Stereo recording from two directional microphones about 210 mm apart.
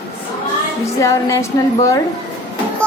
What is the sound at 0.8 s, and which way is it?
Speech, 15° left (ahead or behind).